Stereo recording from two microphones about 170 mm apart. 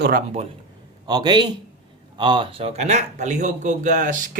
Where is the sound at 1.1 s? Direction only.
25° right (ahead or behind).